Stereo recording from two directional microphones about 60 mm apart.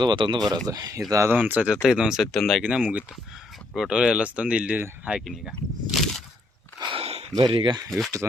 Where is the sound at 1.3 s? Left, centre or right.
Right.